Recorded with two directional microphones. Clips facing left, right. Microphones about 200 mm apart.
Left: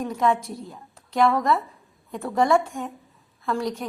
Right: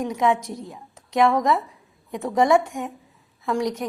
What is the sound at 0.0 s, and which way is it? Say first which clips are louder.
A woman's voice: right 1 dB; 15° right (ahead or behind).